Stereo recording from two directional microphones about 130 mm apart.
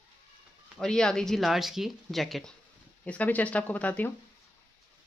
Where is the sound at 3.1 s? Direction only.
10° left (ahead or behind).